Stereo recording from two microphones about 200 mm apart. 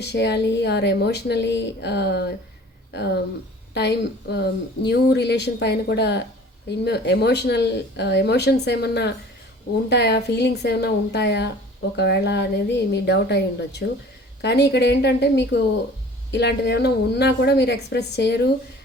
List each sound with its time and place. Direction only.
0.0 s speech: 55° left (ahead or behind)